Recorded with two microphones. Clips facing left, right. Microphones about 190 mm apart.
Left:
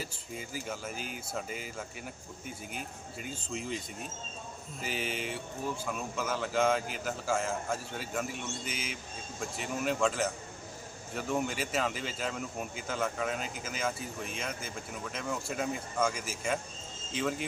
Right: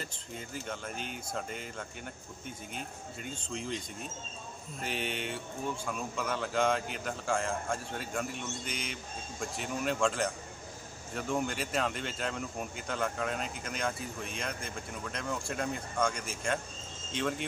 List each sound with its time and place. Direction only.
0.0 s speech: 5° left (ahead or behind)